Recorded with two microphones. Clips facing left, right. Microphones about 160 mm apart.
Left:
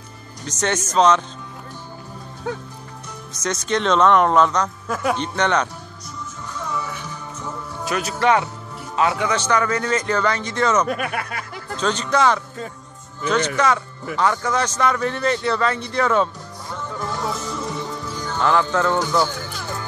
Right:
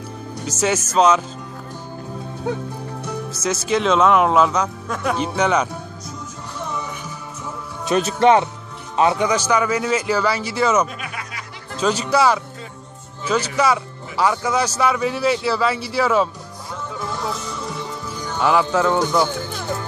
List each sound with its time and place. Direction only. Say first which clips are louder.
0.5 s a man's voice: right 2 dB; 5° right (ahead or behind)
2.4 s a man's voice: right 3 dB; 15° right (ahead or behind)
3.4 s speech: right 2 dB; 5° right (ahead or behind)
4.8 s speech: left 1 dB; 5° left (ahead or behind)
5.1 s a man's voice: right 3 dB; 5° right (ahead or behind)
6.6 s music: even; 20° right (ahead or behind)
7.8 s a man's voice: right 5 dB; 25° right (ahead or behind); by 10.9 s 10° right (ahead or behind)
10.9 s speech: left 8 dB; 55° left (ahead or behind)
11.8 s a man's voice: right 2 dB; 10° right (ahead or behind)
16.9 s music: even; centre (ahead or behind); by 19.8 s 20° right (ahead or behind)